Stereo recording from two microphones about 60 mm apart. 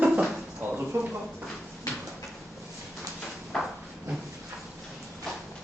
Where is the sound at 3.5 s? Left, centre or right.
Centre.